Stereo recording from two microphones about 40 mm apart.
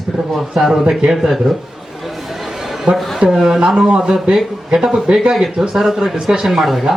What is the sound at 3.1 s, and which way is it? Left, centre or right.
Speech, centre.